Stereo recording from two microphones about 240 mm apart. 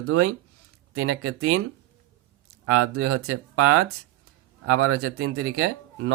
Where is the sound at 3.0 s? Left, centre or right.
Right.